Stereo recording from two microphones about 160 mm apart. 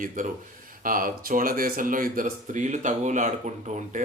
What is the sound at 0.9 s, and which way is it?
Speech, 60° right (ahead or behind).